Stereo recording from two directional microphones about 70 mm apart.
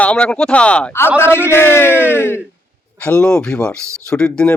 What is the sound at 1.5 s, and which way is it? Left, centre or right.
Speech, left.